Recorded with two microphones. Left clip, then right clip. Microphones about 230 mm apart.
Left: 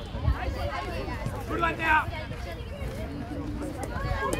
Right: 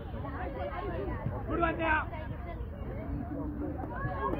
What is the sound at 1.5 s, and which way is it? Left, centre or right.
Speech, right.